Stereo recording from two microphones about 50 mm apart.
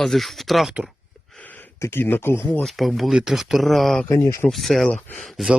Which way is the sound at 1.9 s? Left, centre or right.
Left.